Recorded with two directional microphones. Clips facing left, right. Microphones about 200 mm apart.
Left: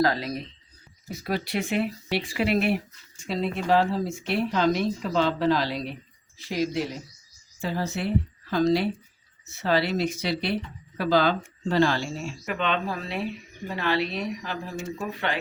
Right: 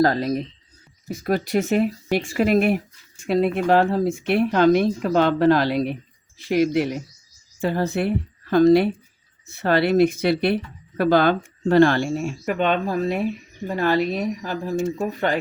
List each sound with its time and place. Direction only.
0.0 s speech: 45° right (ahead or behind)